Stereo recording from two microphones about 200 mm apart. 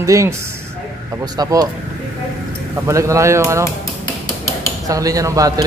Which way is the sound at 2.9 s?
15° right (ahead or behind).